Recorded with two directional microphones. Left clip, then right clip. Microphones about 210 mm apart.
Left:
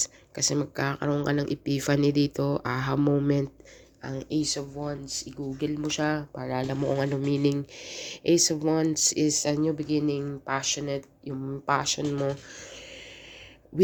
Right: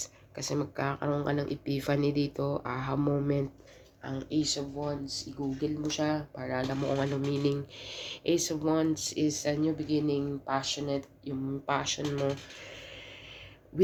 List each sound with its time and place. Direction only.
0.0 s speech: 35° left (ahead or behind)